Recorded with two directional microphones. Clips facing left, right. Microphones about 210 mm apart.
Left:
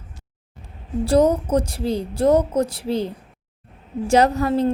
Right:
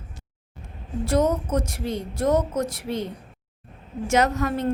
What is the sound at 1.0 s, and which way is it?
A woman's voice, 30° left (ahead or behind).